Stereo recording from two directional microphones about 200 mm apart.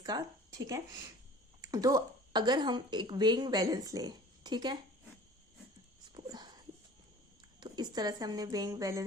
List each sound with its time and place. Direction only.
0.0 s a woman's voice: 20° right (ahead or behind)
6.1 s a sound: 20° right (ahead or behind)
7.6 s a woman's voice: 20° right (ahead or behind)